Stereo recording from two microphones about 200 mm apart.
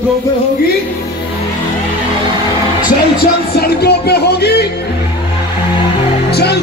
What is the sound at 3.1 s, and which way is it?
Music, 55° left (ahead or behind).